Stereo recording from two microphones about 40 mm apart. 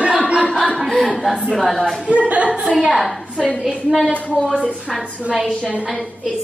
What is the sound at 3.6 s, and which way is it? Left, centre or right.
Speech, centre.